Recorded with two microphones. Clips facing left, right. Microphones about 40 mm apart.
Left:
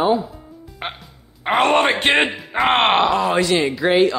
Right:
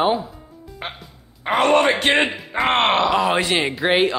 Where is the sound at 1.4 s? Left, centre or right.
Left.